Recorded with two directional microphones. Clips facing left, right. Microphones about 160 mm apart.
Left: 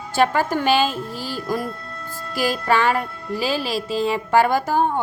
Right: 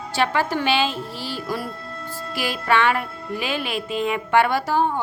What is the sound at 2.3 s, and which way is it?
Music, 40° left (ahead or behind).